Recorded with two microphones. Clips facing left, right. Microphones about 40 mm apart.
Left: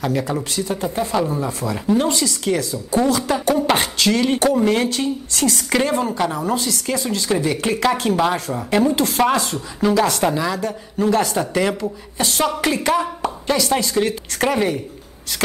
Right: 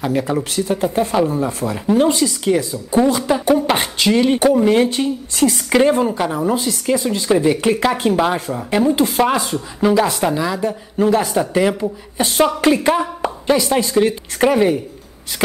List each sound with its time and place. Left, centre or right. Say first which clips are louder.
0.0 s speech: right 2 dB; centre
0.4 s speech: right 4 dB; right
0.7 s speech: right 4 dB; centre
4.8 s speech: right 2 dB; right; by 10.6 s centre
10.6 s speech: right 4 dB; centre
11.1 s speech: right 2 dB; centre
11.8 s a woman's voice: right 3 dB; right
13.9 s speech: right 4 dB; centre